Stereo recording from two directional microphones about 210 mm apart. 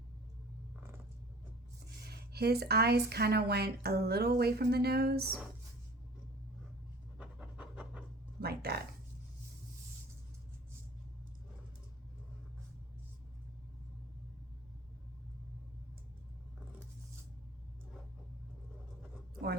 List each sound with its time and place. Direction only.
2.0 s speech: 50° right (ahead or behind)
7.2 s pant: 5° right (ahead or behind)
8.4 s music: 50° right (ahead or behind)
19.4 s a sound: 5° right (ahead or behind)